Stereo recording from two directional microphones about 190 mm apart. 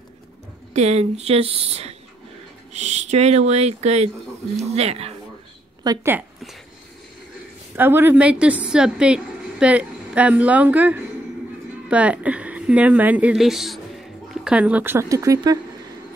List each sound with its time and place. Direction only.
0.7 s speech: 35° right (ahead or behind)
5.9 s a woman's voice: 10° right (ahead or behind)
7.7 s a woman's voice: 10° right (ahead or behind)